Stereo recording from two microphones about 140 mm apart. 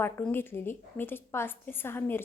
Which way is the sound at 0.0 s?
15° left (ahead or behind).